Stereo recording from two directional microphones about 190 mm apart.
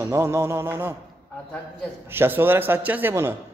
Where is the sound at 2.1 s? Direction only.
10° right (ahead or behind).